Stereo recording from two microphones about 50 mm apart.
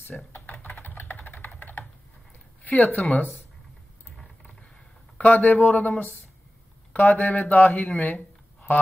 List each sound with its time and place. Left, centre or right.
0.3 s typing: left
2.6 s speech: left
5.1 s speech: left
7.7 s speech: left